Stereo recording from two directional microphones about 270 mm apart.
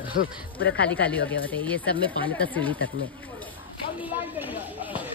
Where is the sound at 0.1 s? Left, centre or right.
Left.